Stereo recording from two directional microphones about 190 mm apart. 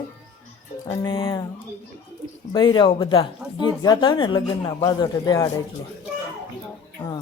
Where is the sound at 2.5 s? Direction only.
25° left (ahead or behind).